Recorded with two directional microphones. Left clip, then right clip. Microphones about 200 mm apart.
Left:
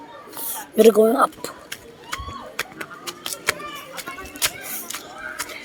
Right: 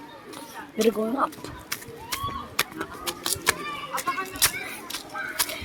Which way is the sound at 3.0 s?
40° right (ahead or behind).